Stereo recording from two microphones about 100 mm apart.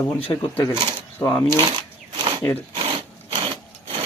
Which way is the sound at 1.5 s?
45° right (ahead or behind).